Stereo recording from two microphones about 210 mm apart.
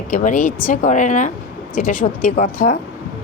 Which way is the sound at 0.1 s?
40° left (ahead or behind).